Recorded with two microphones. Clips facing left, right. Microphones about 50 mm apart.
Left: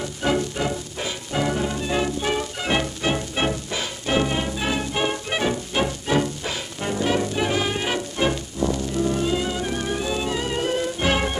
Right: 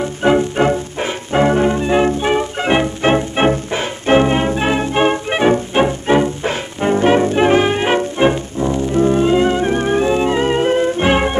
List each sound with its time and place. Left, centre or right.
0.0 s music: right